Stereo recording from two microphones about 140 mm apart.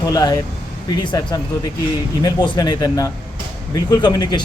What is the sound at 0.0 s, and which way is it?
Speech, 30° left (ahead or behind).